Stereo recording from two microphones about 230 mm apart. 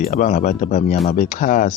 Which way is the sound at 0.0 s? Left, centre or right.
Left.